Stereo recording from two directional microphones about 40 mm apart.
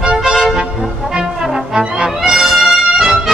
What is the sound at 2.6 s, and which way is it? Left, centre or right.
Music, centre.